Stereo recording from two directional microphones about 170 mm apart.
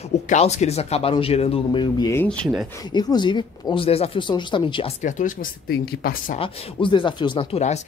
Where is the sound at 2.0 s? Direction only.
10° left (ahead or behind).